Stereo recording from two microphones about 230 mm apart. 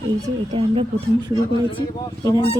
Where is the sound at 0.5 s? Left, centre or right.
Right.